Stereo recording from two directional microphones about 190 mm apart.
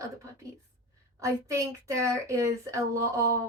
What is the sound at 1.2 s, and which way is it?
Speech, 15° right (ahead or behind).